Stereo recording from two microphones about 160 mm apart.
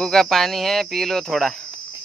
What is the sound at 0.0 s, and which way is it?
Speech, 5° left (ahead or behind).